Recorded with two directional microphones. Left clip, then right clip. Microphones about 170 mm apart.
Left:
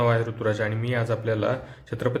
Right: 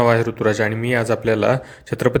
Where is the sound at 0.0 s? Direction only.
35° right (ahead or behind).